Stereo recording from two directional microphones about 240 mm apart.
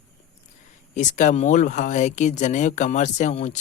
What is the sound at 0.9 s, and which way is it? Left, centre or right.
Speech, left.